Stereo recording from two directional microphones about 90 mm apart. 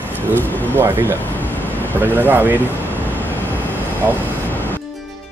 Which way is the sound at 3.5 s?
20° left (ahead or behind).